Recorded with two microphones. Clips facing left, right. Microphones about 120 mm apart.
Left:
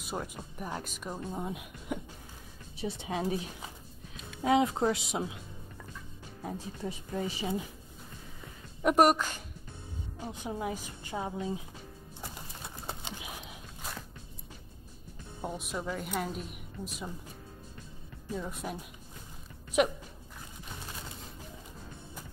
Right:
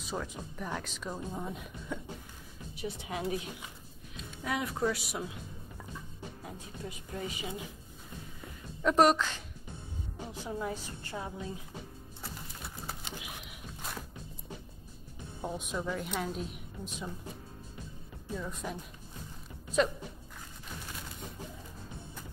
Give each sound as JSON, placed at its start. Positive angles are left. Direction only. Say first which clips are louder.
{"t": 0.1, "sound": "speech", "louder": "even", "side_deg": 15}
{"t": 2.8, "sound": "speech", "louder": "left 3 dB", "side_deg": 25}
{"t": 4.4, "sound": "speech", "louder": "left 7 dB", "side_deg": 25}
{"t": 6.4, "sound": "speech", "louder": "left 8 dB", "side_deg": 35}
{"t": 8.8, "sound": "speech", "louder": "left 1 dB", "side_deg": 10}
{"t": 12.2, "sound": "pigeon", "louder": "left 1 dB", "side_deg": 20}
{"t": 15.4, "sound": "a woman's voice", "louder": "even", "side_deg": 5}
{"t": 18.5, "sound": "speech", "louder": "left 1 dB", "side_deg": 10}